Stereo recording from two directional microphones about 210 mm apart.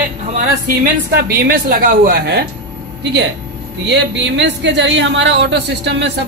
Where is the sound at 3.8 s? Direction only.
60° right (ahead or behind).